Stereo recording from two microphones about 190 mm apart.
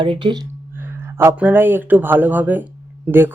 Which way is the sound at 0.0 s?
25° right (ahead or behind).